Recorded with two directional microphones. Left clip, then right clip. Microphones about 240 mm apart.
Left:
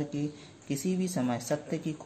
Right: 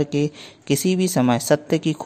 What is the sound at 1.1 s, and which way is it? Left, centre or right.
Speech, right.